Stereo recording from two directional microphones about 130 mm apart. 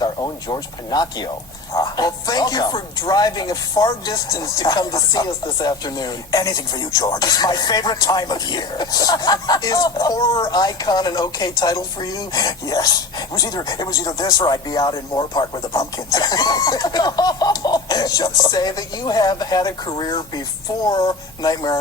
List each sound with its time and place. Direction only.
0.0 s speech: 30° left (ahead or behind)